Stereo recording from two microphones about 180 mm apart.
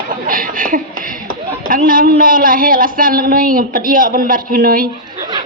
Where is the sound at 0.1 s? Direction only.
50° right (ahead or behind).